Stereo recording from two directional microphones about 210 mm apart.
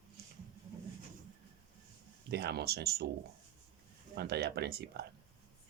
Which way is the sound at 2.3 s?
50° right (ahead or behind).